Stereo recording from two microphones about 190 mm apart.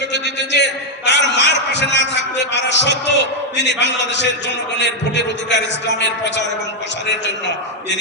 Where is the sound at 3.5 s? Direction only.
65° left (ahead or behind).